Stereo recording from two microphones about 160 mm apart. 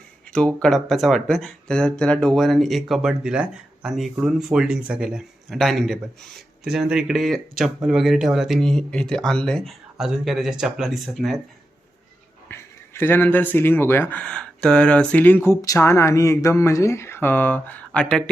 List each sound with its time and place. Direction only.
0.3 s speech: 5° left (ahead or behind)
12.5 s speech: 15° left (ahead or behind)